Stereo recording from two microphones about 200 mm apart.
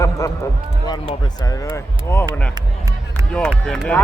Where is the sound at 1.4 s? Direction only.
15° left (ahead or behind).